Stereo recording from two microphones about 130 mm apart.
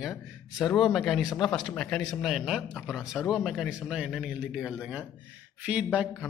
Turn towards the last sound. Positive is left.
turn(degrees=-5)  # may be behind; listen again after turning